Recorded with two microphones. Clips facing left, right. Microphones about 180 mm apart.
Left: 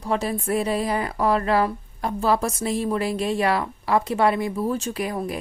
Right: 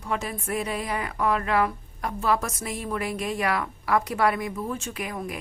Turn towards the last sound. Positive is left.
turn(degrees=35)  # may be behind; listen again after turning